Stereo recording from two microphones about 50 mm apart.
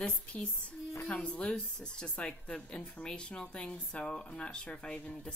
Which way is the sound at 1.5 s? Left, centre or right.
Centre.